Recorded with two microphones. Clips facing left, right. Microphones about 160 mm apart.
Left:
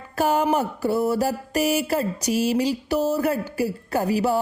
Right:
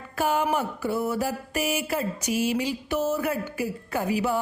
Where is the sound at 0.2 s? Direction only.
40° left (ahead or behind).